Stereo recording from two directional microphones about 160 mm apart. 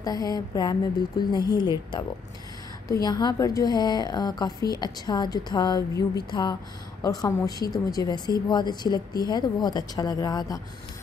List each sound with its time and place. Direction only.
0.0 s speech: 25° left (ahead or behind)